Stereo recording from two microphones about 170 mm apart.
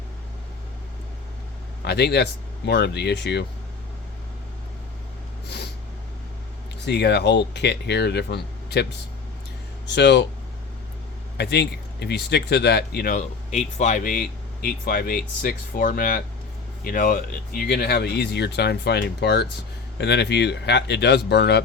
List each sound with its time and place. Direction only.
1.8 s speech: 75° left (ahead or behind)
6.8 s speech: 80° left
9.9 s speech: 90° left
11.3 s speech: 75° left (ahead or behind)
13.1 s speech: 40° left (ahead or behind); by 21.6 s 80° left